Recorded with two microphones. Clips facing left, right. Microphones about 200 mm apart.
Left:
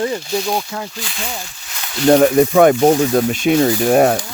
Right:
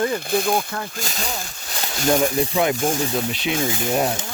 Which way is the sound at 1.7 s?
35° right (ahead or behind).